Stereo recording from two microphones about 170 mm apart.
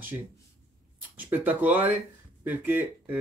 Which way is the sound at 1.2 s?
10° right (ahead or behind).